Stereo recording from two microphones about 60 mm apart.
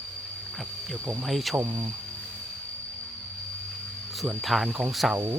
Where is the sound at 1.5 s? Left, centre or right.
Right.